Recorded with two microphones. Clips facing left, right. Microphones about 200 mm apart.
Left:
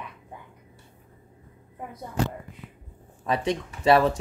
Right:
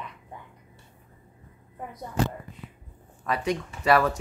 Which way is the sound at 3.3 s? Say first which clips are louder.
Left 2 dB; 25° left (ahead or behind).